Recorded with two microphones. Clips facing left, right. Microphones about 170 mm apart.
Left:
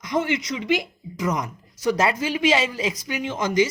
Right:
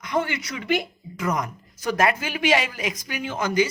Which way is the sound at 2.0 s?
25° left (ahead or behind).